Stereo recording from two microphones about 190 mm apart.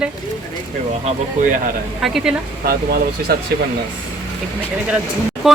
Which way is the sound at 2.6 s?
55° right (ahead or behind).